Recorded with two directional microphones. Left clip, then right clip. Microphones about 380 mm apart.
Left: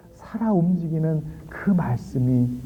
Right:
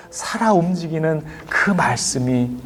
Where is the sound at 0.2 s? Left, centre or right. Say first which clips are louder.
Right 9 dB; centre.